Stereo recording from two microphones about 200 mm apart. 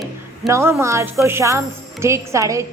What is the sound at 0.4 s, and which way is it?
Speech, 15° right (ahead or behind).